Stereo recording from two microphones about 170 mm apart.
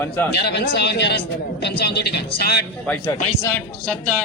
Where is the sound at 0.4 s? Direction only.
80° left.